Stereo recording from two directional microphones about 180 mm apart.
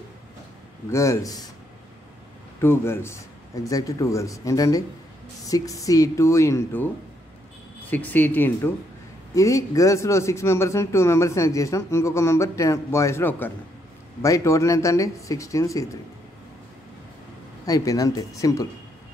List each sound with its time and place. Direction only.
0.8 s a man's voice: 15° left (ahead or behind)
2.6 s a man's voice: 15° left (ahead or behind)
7.9 s a man's voice: 10° left (ahead or behind)
17.6 s speech: 20° left (ahead or behind)